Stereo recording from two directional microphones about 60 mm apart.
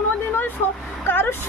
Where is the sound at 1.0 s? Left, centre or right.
Left.